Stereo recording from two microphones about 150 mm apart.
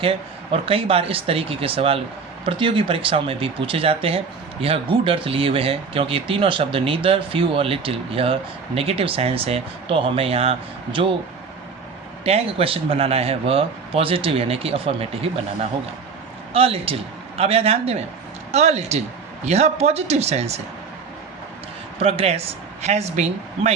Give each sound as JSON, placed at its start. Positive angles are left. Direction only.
{"t": 0.0, "sound": "speech", "side_deg": -40}
{"t": 12.2, "sound": "speech", "side_deg": -40}
{"t": 16.5, "sound": "a man's voice", "side_deg": -40}
{"t": 22.0, "sound": "speech", "side_deg": -40}